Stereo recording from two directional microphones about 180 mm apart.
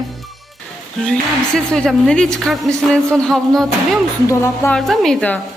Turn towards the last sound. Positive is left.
turn(degrees=5)  # may be behind; listen again after turning